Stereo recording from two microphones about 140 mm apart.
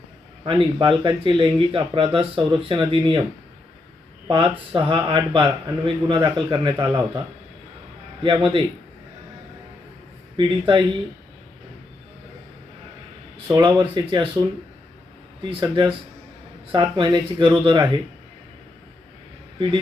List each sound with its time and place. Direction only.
0.4 s speech: 35° right (ahead or behind)
4.3 s speech: 40° right (ahead or behind)
8.2 s speech: 35° right (ahead or behind)
10.3 s speech: 35° right (ahead or behind)
13.5 s speech: 30° right (ahead or behind)
15.4 s speech: 35° right (ahead or behind)